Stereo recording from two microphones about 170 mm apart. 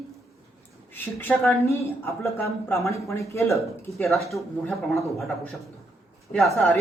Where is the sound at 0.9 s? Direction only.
10° left (ahead or behind).